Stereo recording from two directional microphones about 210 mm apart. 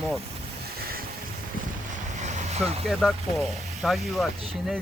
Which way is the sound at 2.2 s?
35° right (ahead or behind).